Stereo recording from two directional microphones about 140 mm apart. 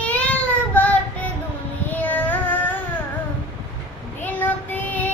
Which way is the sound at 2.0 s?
10° left (ahead or behind).